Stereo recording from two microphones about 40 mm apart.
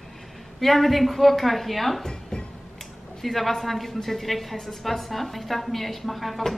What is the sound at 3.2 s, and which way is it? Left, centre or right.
A woman's voice, centre.